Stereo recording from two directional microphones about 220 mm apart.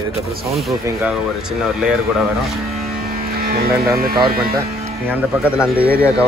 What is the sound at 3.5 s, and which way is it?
Speech, 45° right (ahead or behind).